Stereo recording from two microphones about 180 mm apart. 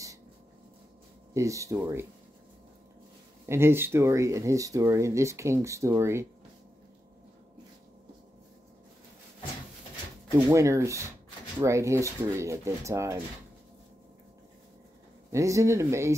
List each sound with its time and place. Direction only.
1.3 s speech: 15° right (ahead or behind)
3.4 s speech: 15° right (ahead or behind)
10.5 s speech: 15° right (ahead or behind)
15.3 s speech: 15° right (ahead or behind)